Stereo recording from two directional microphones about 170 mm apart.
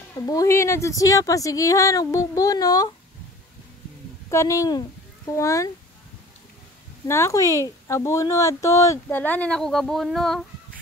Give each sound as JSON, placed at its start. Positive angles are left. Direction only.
{"t": 0.3, "sound": "speech", "side_deg": 20}
{"t": 4.3, "sound": "speech", "side_deg": 15}
{"t": 7.1, "sound": "speech", "side_deg": 15}